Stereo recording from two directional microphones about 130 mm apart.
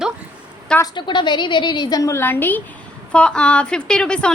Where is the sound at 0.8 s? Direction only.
35° left (ahead or behind).